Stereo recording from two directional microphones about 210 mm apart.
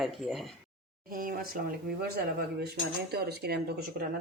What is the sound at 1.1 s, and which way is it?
Speech, 45° right (ahead or behind).